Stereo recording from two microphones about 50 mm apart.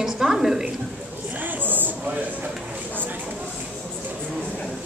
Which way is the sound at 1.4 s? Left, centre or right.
Right.